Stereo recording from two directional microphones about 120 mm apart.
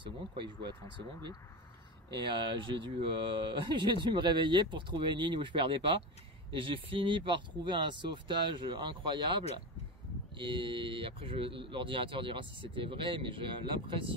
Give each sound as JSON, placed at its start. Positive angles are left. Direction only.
{"t": 2.4, "sound": "speech", "side_deg": -40}